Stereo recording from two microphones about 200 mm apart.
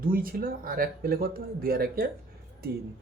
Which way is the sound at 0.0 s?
45° right (ahead or behind).